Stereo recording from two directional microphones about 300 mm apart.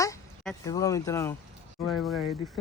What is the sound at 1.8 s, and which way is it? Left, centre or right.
Speech, centre.